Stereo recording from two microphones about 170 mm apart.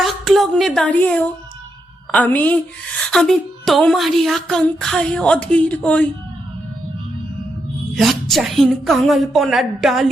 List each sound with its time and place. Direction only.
0.0 s a woman's voice: centre (ahead or behind)
7.9 s a woman's voice: centre (ahead or behind)